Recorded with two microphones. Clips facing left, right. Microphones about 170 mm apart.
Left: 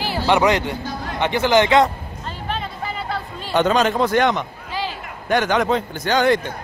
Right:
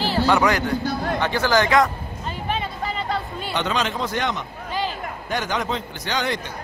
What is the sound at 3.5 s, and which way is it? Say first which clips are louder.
A man's voice: left 8 dB; 45° left (ahead or behind).